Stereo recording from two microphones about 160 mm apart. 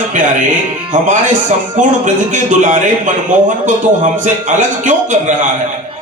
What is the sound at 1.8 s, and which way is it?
Speech, 50° right (ahead or behind).